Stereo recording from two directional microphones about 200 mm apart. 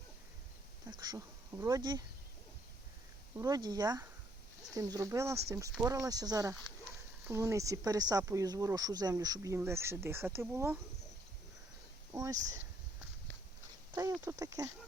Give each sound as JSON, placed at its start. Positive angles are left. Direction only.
{"t": 0.9, "sound": "speech", "side_deg": -20}
{"t": 3.3, "sound": "speech", "side_deg": -20}
{"t": 12.1, "sound": "speech", "side_deg": -15}
{"t": 13.9, "sound": "speech", "side_deg": -10}